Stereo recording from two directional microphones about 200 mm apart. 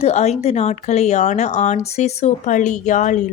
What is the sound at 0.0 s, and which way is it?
Speech, 35° left (ahead or behind).